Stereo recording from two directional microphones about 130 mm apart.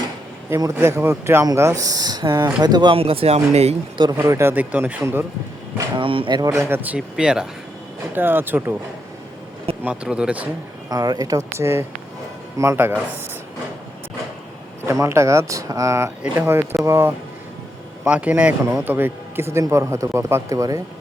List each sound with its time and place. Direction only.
0.5 s a man's voice: 20° right (ahead or behind)
2.9 s speech: 45° right (ahead or behind)
4.1 s speech: 20° right (ahead or behind)
6.0 s speech: 40° right (ahead or behind)
6.5 s speech: 20° right (ahead or behind)
9.8 s speech: 5° right (ahead or behind)
10.8 s a man's voice: 30° right (ahead or behind)
14.8 s a man's voice: 20° right (ahead or behind)